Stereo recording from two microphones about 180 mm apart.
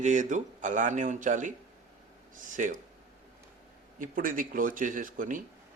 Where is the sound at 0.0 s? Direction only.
45° right (ahead or behind).